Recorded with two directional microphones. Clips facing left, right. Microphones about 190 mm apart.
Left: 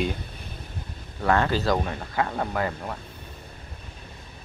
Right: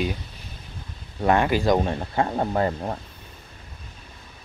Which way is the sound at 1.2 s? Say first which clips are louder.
Right 3 dB; 15° right (ahead or behind).